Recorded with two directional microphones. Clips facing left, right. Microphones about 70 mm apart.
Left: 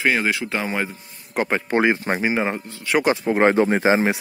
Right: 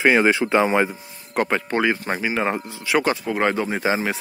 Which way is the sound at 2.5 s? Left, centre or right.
Centre.